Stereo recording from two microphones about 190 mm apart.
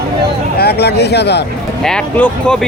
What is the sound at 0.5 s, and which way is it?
Speech, 60° left (ahead or behind).